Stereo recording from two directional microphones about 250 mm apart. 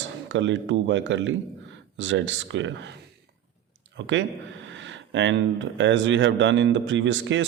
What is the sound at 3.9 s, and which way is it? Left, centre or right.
Speech, right.